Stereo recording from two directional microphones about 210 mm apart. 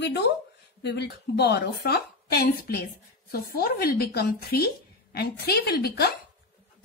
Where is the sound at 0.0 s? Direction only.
50° left (ahead or behind).